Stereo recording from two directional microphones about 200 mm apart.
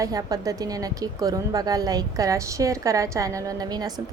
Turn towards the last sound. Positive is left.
turn(degrees=-20)  # may be behind; listen again after turning